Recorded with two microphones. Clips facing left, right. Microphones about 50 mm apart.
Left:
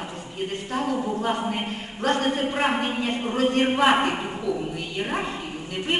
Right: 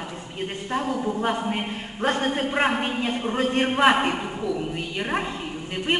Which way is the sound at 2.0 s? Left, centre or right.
Right.